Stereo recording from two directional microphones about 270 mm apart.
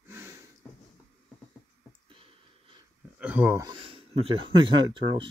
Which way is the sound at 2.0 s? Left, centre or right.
Centre.